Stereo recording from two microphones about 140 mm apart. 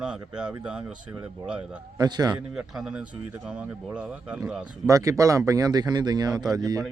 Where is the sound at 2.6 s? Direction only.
5° right (ahead or behind).